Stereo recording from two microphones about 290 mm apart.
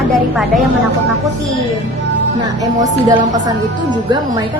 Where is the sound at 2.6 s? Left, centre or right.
Centre.